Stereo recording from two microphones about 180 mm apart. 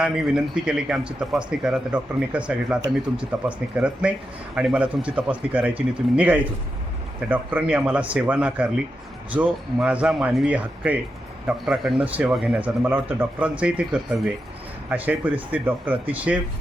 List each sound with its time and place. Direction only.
0.0 s a man's voice: 5° right (ahead or behind)